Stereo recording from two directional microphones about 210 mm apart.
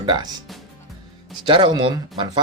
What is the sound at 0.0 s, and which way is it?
Speech, 20° right (ahead or behind).